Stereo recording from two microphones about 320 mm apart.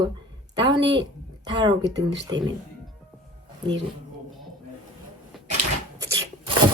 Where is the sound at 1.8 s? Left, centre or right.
Right.